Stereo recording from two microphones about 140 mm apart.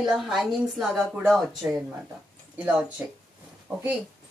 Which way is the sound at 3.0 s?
15° right (ahead or behind).